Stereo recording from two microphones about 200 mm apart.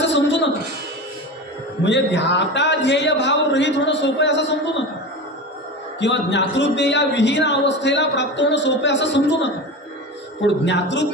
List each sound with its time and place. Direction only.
0.0 s a sound: 60° left (ahead or behind)
1.9 s a man's voice: 60° left (ahead or behind)
5.9 s a man's voice: 60° left (ahead or behind)